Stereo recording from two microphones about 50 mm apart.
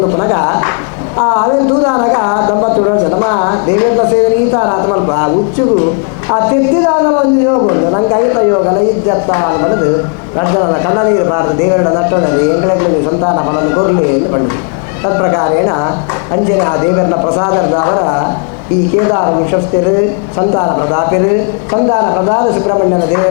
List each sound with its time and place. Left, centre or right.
0.2 s speech: left